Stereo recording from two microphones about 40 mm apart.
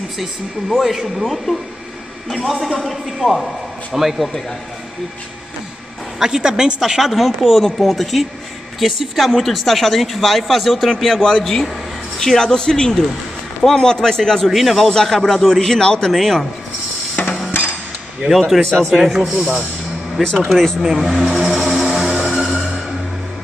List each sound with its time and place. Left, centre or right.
0.7 s speech: centre
6.1 s speech: centre
11.2 s a man's voice: centre
14.5 s speech: centre
14.9 s a man's voice: centre
17.2 s a sound: left
18.2 s a man's voice: right
18.6 s a man's voice: centre
18.9 s speech: centre
19.3 s speech: centre
21.1 s music: centre